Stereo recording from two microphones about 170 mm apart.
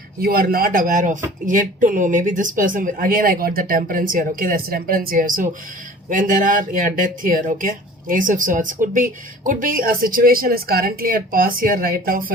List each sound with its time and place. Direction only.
0.2 s speech: 65° right (ahead or behind)